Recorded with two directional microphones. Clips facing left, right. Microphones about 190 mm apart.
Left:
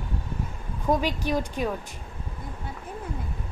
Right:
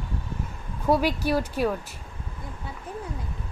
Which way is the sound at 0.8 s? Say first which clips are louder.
Right 2 dB; 10° right (ahead or behind).